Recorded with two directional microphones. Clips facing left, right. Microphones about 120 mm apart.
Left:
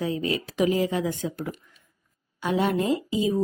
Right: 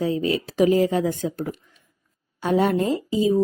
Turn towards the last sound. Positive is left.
turn(degrees=-35)  # may be behind; listen again after turning